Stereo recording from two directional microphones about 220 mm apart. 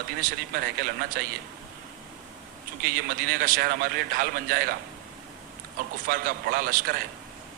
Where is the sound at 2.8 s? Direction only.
40° right (ahead or behind).